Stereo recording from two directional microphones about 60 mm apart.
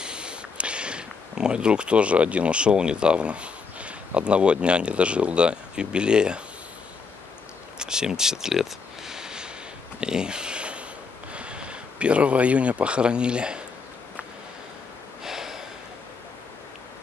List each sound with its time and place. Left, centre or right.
0.0 s speech: centre
7.8 s a sound: centre
11.3 s speech: centre
15.2 s snort: centre